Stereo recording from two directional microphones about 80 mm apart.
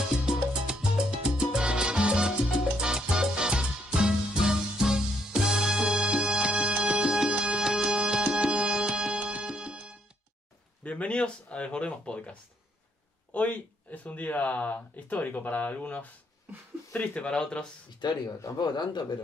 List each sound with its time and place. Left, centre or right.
0.2 s salsa music: centre
10.8 s speech: centre
18.0 s a man's voice: left